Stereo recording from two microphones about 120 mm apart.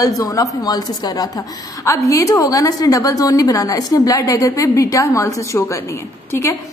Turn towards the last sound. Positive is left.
turn(degrees=25)  # may be behind; listen again after turning